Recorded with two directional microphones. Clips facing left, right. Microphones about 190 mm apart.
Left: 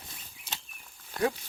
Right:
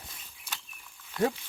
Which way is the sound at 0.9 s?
40° left (ahead or behind).